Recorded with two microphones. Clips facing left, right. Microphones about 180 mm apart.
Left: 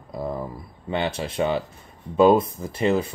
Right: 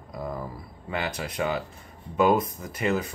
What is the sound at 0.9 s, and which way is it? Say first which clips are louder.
Speech: left 5 dB; 25° left (ahead or behind).